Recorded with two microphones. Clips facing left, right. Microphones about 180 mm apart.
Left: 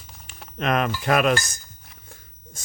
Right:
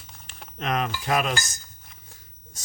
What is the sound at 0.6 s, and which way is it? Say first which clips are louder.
Dishes: left 4 dB; 60° left (ahead or behind).